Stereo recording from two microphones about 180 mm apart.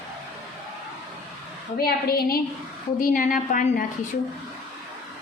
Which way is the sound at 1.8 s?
55° left (ahead or behind).